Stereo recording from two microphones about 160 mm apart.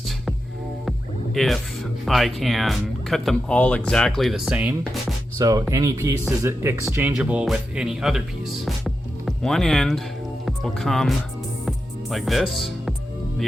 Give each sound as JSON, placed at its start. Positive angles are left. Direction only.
{"t": 0.9, "sound": "speech", "side_deg": 0}
{"t": 5.4, "sound": "speech", "side_deg": -20}
{"t": 8.6, "sound": "music", "side_deg": 0}
{"t": 10.4, "sound": "speech", "side_deg": 0}
{"t": 12.1, "sound": "speech", "side_deg": 0}